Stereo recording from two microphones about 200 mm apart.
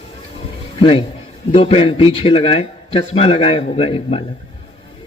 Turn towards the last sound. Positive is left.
turn(degrees=30)  # may be behind; listen again after turning